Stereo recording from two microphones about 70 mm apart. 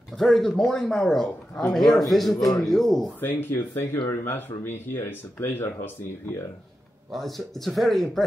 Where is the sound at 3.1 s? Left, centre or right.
Left.